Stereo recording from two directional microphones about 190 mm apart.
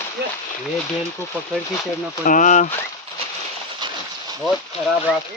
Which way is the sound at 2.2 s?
45° left (ahead or behind).